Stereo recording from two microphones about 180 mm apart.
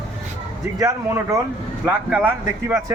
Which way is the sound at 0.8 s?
15° right (ahead or behind).